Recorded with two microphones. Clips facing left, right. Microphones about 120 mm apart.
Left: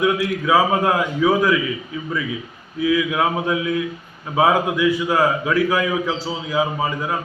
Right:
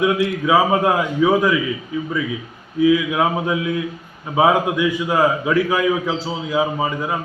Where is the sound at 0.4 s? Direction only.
10° right (ahead or behind).